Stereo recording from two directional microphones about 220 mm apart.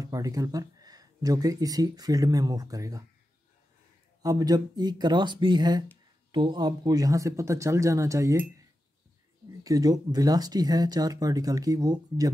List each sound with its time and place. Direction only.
0.0 s speech: 15° right (ahead or behind)
4.2 s speech: 15° right (ahead or behind)